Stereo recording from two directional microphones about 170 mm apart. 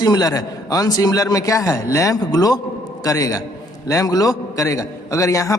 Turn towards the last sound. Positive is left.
turn(degrees=20)  # may be behind; listen again after turning